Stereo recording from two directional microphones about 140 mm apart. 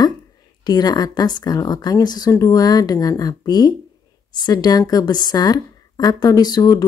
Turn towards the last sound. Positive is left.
turn(degrees=30)  # may be behind; listen again after turning